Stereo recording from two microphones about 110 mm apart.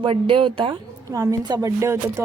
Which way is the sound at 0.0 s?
55° right (ahead or behind).